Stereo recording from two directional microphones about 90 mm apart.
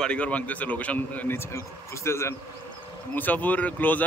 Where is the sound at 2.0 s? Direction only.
30° left (ahead or behind).